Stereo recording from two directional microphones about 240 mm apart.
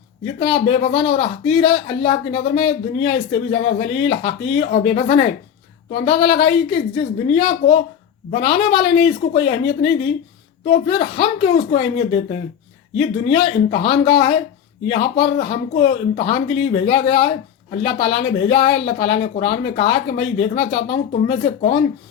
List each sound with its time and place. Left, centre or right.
0.3 s speech: left